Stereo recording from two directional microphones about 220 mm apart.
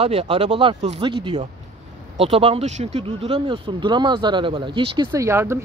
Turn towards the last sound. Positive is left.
turn(degrees=-10)  # may be behind; listen again after turning